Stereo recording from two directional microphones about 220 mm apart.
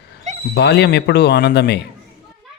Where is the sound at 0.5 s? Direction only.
50° left (ahead or behind).